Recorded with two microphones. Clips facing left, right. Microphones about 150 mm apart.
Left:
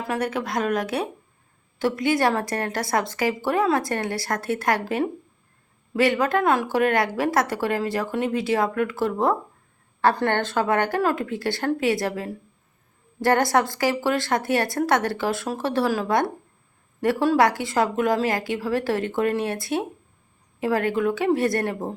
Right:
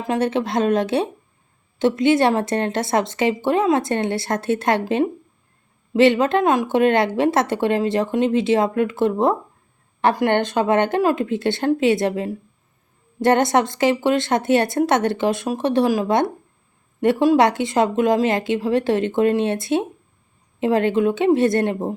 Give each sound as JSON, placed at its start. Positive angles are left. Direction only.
{"t": 0.0, "sound": "a woman's voice", "side_deg": -25}